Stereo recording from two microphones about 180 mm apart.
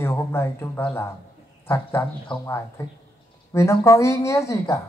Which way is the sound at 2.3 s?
30° left (ahead or behind).